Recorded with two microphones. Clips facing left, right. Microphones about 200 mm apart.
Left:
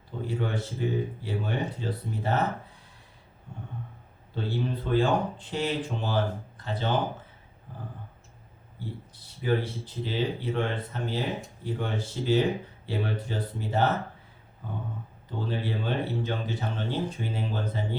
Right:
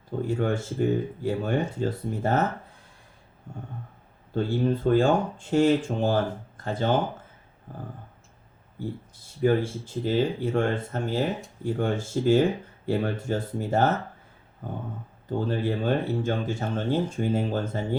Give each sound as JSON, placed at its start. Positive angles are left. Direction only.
{"t": 0.2, "sound": "speech", "side_deg": -45}
{"t": 3.5, "sound": "speech", "side_deg": -45}
{"t": 9.2, "sound": "speech", "side_deg": -45}